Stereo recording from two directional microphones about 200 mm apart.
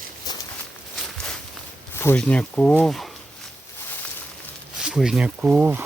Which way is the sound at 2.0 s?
10° left (ahead or behind).